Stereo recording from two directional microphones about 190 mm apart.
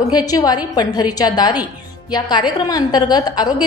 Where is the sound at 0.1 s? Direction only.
20° left (ahead or behind).